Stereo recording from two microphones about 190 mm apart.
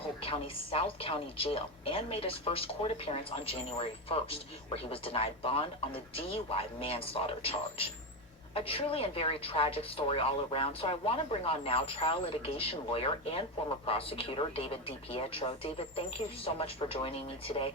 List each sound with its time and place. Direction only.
0.2 s a woman's voice: 30° left (ahead or behind)